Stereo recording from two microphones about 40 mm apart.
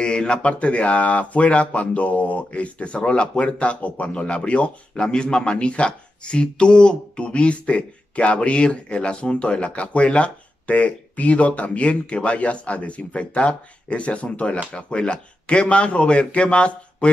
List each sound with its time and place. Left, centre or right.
0.0 s speech: left
4.9 s speech: left